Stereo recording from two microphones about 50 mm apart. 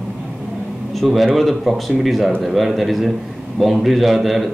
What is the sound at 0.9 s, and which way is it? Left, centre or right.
Speech, centre.